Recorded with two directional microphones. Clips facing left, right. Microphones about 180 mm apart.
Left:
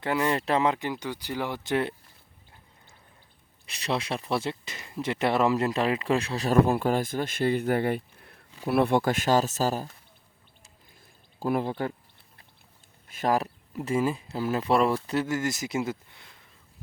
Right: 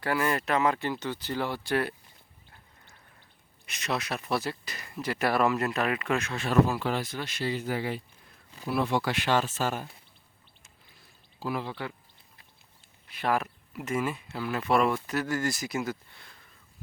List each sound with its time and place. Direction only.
0.0 s speech: 20° left (ahead or behind)
3.7 s speech: 30° left (ahead or behind)
6.7 s speech: 50° left (ahead or behind)
11.0 s a sound: 50° left (ahead or behind)
13.1 s speech: 40° left (ahead or behind); by 16.3 s 20° left (ahead or behind)